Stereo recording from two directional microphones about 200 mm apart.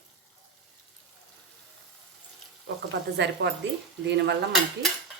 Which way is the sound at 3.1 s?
60° right (ahead or behind).